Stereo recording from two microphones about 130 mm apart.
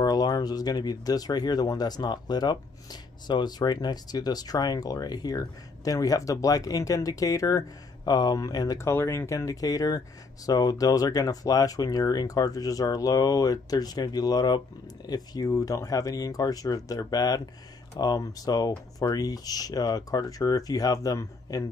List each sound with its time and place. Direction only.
0.0 s speech: 30° left (ahead or behind)